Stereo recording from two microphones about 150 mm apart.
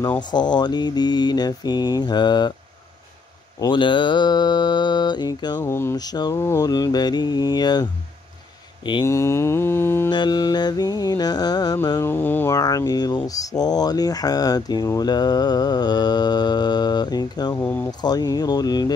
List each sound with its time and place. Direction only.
0.3 s mantra: 30° left (ahead or behind)
3.5 s mantra: 30° left (ahead or behind)
5.6 s mantra: 15° left (ahead or behind)
9.0 s mantra: 20° left (ahead or behind)
10.0 s mantra: 30° left (ahead or behind)
17.6 s mantra: 10° left (ahead or behind)
18.0 s mantra: 25° left (ahead or behind)